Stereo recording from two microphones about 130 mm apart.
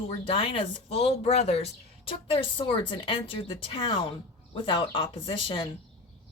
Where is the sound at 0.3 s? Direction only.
40° left (ahead or behind).